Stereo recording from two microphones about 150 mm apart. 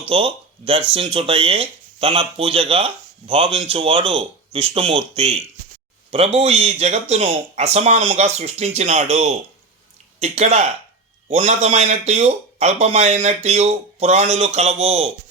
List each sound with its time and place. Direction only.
0.1 s speech: 40° right (ahead or behind)